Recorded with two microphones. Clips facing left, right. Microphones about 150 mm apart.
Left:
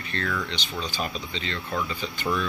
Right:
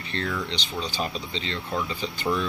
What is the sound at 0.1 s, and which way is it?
Speech, 30° right (ahead or behind).